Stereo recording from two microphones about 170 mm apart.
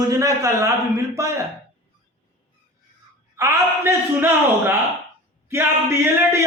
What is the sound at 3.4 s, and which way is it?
Speech, 15° right (ahead or behind).